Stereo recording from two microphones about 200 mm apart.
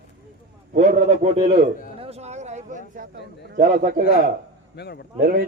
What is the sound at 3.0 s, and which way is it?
Speech, 45° right (ahead or behind).